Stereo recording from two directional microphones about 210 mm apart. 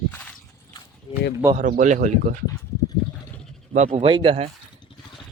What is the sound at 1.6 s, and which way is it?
Speech, 40° right (ahead or behind).